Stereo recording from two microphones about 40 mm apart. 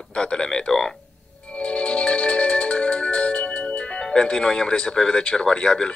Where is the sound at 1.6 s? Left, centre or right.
Left.